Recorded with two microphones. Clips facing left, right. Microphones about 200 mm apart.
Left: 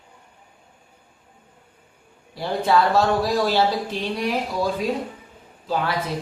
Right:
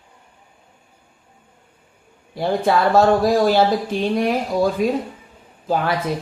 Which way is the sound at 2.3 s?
50° right (ahead or behind).